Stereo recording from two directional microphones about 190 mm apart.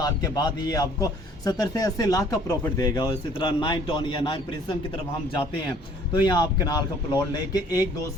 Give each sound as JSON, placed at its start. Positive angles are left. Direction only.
{"t": 0.0, "sound": "a man's voice", "side_deg": 20}
{"t": 6.1, "sound": "a man's voice", "side_deg": 20}